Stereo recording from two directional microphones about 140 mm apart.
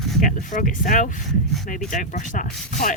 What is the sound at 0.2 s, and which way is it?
Speech, 75° left (ahead or behind).